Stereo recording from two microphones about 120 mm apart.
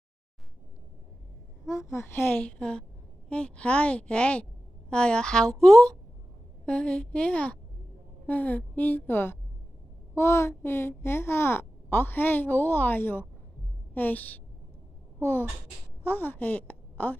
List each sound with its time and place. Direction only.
1.7 s a woman's voice: 25° left (ahead or behind)